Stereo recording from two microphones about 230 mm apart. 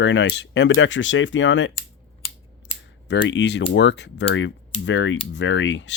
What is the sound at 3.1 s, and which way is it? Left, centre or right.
Speech, left.